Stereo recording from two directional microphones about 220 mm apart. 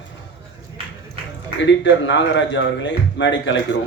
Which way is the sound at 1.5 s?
55° left (ahead or behind).